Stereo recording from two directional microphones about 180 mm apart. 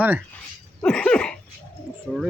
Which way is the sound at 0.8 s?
5° left (ahead or behind).